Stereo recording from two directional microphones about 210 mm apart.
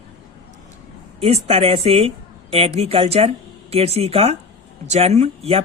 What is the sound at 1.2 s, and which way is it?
A woman's voice, 30° right (ahead or behind).